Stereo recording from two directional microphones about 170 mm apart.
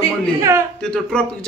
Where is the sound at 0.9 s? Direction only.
5° left (ahead or behind).